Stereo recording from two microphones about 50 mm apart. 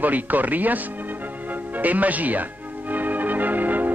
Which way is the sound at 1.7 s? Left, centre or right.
Right.